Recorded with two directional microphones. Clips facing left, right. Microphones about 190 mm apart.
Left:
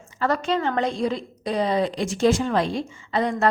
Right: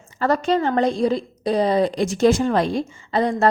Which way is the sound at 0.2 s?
40° right (ahead or behind).